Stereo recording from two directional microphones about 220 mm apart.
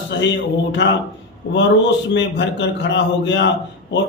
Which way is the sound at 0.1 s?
55° left (ahead or behind).